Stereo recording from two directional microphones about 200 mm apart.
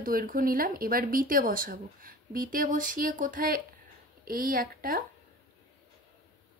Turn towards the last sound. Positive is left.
turn(degrees=-45)  # may be behind; listen again after turning